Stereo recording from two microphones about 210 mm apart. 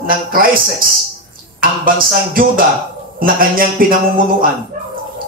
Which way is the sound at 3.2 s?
40° right (ahead or behind).